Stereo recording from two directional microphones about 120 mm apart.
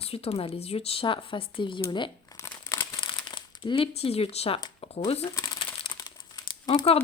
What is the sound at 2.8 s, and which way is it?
Crumpling, 40° left (ahead or behind).